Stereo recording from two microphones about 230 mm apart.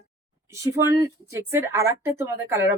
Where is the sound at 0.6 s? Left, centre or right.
Centre.